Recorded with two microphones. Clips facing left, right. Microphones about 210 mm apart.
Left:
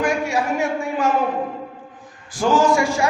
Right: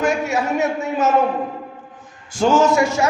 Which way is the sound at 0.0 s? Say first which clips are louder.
Right 1 dB; 25° right (ahead or behind).